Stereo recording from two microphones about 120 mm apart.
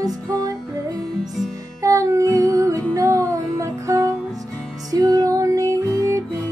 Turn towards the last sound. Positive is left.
turn(degrees=-25)  # may be behind; listen again after turning